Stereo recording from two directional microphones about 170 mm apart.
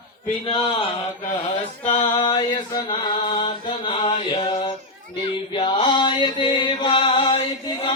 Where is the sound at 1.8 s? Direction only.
25° left (ahead or behind).